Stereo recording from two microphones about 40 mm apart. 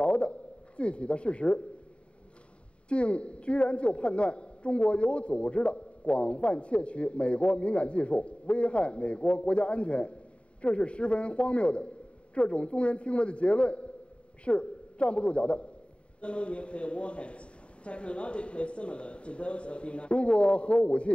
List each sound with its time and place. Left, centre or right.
0.0 s a man's voice: left
2.9 s a woman's voice: left